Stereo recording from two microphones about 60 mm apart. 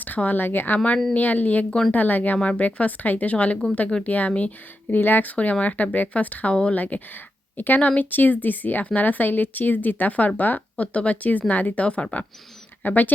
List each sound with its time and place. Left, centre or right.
0.0 s speech: left
7.5 s speech: left